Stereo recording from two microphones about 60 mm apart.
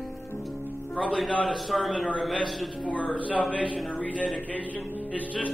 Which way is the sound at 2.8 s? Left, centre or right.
Left.